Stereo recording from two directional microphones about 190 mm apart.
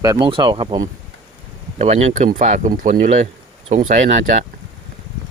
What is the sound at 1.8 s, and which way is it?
Speech, 35° right (ahead or behind).